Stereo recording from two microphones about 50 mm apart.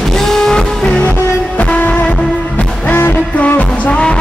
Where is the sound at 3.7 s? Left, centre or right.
Left.